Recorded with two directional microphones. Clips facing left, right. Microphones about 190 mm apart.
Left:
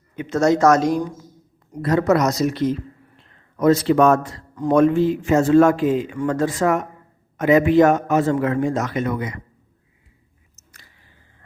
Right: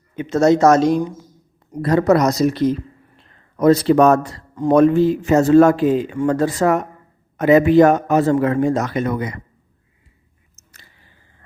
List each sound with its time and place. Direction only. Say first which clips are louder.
0.2 s a man's voice: right 3 dB; 25° right (ahead or behind)
4.5 s speech: right 3 dB; 25° right (ahead or behind)
4.8 s a man's voice: right 2 dB; 40° right (ahead or behind)